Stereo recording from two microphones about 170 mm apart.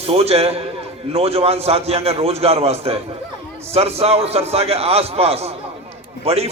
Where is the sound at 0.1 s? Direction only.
35° right (ahead or behind).